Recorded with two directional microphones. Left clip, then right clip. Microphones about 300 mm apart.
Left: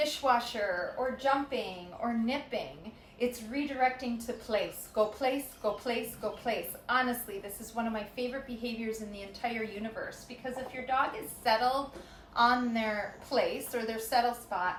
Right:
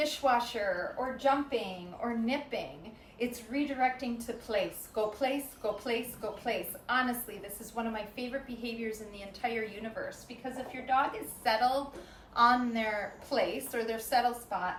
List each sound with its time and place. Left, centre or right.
0.0 s a woman's voice: centre